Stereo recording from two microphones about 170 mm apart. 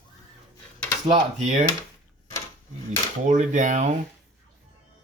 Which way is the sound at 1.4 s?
45° right (ahead or behind).